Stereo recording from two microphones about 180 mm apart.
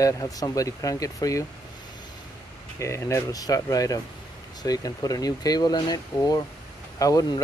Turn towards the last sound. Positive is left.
turn(degrees=20)  # may be behind; listen again after turning